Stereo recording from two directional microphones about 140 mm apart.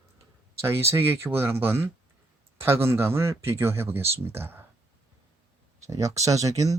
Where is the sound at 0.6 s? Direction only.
20° right (ahead or behind).